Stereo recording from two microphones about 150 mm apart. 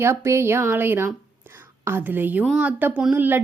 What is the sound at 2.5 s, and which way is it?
Speech, 5° right (ahead or behind).